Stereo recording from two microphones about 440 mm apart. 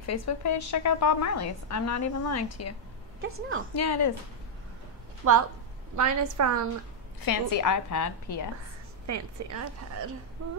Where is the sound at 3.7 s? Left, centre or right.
Left.